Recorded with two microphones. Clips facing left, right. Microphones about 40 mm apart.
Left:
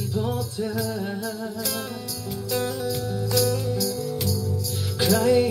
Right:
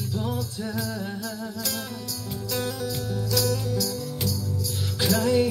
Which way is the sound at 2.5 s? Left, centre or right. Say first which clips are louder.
Left 3 dB; centre.